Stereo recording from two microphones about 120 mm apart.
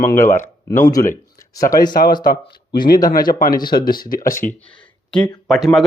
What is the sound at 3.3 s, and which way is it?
Speech, 90° left.